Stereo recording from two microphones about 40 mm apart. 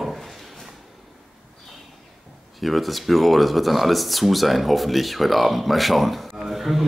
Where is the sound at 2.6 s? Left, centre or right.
Centre.